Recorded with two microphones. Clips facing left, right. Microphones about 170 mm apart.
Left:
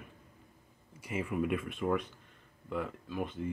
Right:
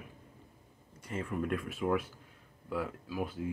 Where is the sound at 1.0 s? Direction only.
10° left (ahead or behind).